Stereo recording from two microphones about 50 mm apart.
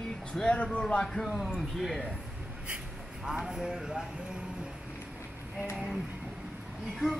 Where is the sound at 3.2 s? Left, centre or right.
Centre.